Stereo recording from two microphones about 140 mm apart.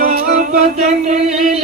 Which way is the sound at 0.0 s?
65° right (ahead or behind).